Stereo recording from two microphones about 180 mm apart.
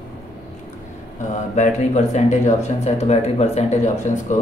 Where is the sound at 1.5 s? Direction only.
40° left (ahead or behind).